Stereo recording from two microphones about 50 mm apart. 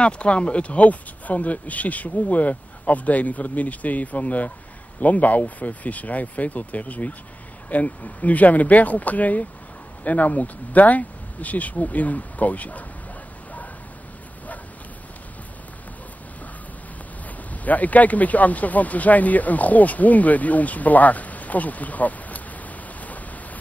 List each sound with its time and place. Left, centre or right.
0.0 s speech: left
17.6 s speech: left
22.9 s rain: left